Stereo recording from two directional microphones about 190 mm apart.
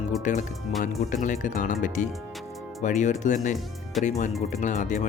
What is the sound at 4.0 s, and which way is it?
Speech, centre (ahead or behind).